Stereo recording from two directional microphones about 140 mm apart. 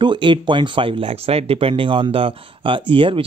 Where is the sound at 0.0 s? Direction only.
35° right (ahead or behind).